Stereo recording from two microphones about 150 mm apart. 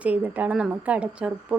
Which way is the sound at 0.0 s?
10° right (ahead or behind).